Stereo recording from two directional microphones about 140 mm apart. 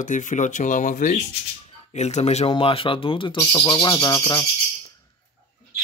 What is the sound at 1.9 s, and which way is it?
Speech, 55° left (ahead or behind).